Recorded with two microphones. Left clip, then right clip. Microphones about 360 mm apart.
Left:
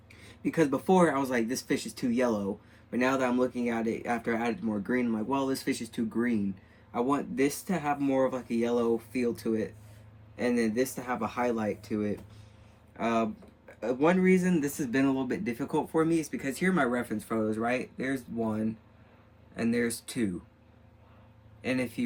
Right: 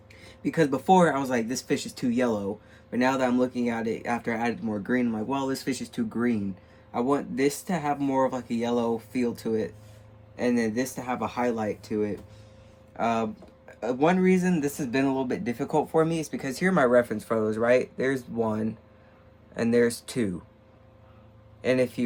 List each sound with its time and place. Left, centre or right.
0.4 s speech: centre
13.0 s speech: centre
21.6 s speech: centre